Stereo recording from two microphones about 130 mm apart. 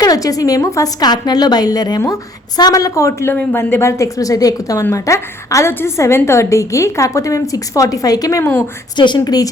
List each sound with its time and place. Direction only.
0.0 s a woman's voice: 30° left (ahead or behind)
9.0 s a woman's voice: 35° left (ahead or behind)